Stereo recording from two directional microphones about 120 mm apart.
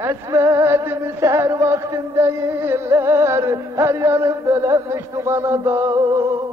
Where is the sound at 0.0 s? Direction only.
25° right (ahead or behind).